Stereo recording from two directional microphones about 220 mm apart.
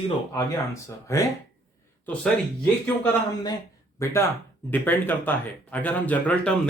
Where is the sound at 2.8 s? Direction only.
10° left (ahead or behind).